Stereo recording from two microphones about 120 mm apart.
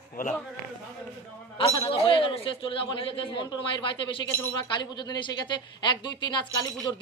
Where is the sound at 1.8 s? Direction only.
45° left (ahead or behind).